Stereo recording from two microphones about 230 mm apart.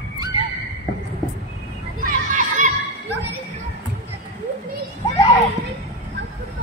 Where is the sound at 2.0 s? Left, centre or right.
Right.